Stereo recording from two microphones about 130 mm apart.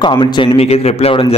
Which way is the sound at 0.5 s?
50° left (ahead or behind).